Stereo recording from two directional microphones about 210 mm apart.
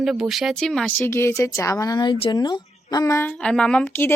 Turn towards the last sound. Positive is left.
turn(degrees=10)  # may be behind; listen again after turning